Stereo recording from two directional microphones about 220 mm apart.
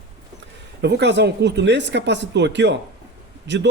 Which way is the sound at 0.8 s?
50° right (ahead or behind).